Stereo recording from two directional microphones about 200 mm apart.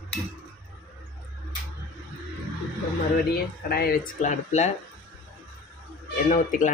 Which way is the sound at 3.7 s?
50° left (ahead or behind).